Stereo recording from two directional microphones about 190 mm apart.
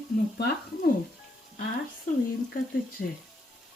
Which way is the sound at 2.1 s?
40° left (ahead or behind).